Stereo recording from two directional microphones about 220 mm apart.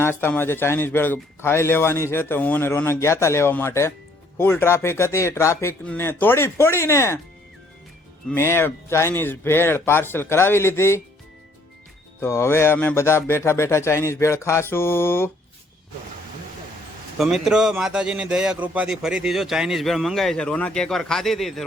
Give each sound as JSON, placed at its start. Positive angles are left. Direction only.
{"t": 0.0, "sound": "a man's voice", "side_deg": 10}
{"t": 8.3, "sound": "a man's voice", "side_deg": 10}
{"t": 12.2, "sound": "a man's voice", "side_deg": 10}
{"t": 17.2, "sound": "a man's voice", "side_deg": 0}